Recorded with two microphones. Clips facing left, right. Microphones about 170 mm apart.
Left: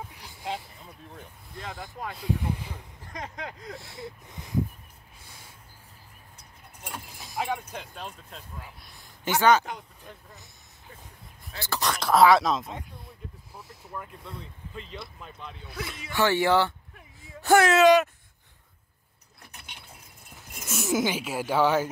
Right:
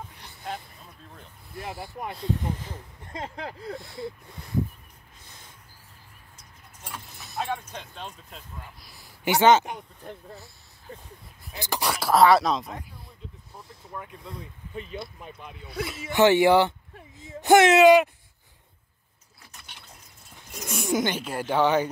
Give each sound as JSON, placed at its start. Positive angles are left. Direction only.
{"t": 0.1, "sound": "a sound", "side_deg": 10}
{"t": 1.6, "sound": "speech", "side_deg": -10}
{"t": 2.1, "sound": "speech", "side_deg": 10}
{"t": 3.0, "sound": "speech", "side_deg": -25}
{"t": 5.2, "sound": "a sound", "side_deg": 10}
{"t": 6.8, "sound": "dog", "side_deg": 15}
{"t": 7.2, "sound": "speech", "side_deg": 10}
{"t": 9.2, "sound": "speech", "side_deg": -20}
{"t": 11.5, "sound": "speech", "side_deg": -15}
{"t": 16.9, "sound": "gasp", "side_deg": -25}
{"t": 17.8, "sound": "speech", "side_deg": -10}
{"t": 19.6, "sound": "a sound", "side_deg": 15}
{"t": 20.6, "sound": "speech", "side_deg": 5}